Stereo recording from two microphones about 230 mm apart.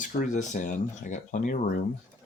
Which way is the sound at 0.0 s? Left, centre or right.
Left.